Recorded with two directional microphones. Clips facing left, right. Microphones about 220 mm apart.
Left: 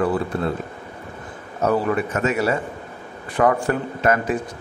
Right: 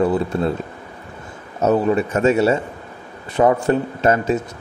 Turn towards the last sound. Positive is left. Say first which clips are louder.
# right 3 dB
turn(degrees=-25)  # may be behind; listen again after turning